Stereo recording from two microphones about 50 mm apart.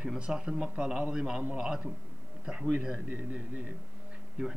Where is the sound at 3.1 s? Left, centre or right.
Right.